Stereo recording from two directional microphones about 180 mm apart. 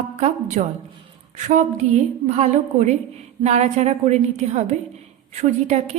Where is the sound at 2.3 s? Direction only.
40° right (ahead or behind).